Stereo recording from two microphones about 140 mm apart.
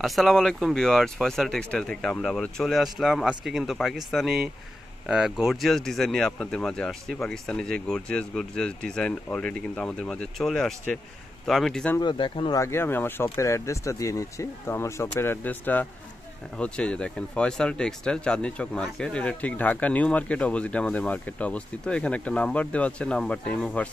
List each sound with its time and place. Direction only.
0.0 s speech: centre (ahead or behind)
12.0 s speech: 35° left (ahead or behind)
12.5 s speech: 20° left (ahead or behind)